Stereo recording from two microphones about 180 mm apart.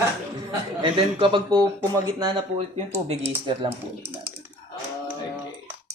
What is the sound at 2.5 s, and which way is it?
Speech, 35° right (ahead or behind).